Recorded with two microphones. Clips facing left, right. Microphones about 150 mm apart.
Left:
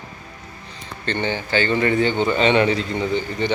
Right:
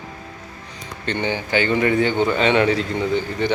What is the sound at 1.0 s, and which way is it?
Speech, 10° right (ahead or behind).